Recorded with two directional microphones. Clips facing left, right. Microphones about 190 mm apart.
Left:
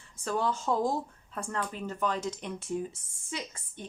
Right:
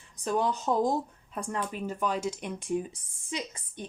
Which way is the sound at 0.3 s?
15° right (ahead or behind).